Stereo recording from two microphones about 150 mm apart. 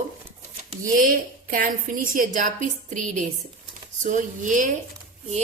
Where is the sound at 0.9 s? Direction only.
70° right (ahead or behind).